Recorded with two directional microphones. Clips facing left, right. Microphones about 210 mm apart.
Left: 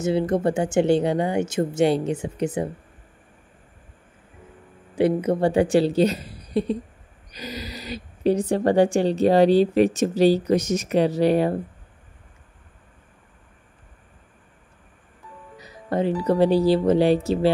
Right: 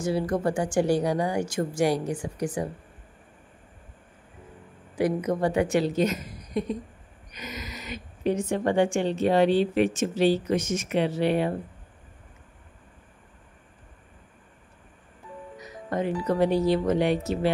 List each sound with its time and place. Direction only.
0.0 s speech: 25° left (ahead or behind)
4.9 s speech: 30° left (ahead or behind)
15.5 s music: 30° left (ahead or behind)
16.3 s speech: 30° left (ahead or behind)